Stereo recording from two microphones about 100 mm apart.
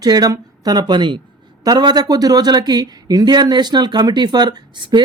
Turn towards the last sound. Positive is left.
turn(degrees=-50)  # may be behind; listen again after turning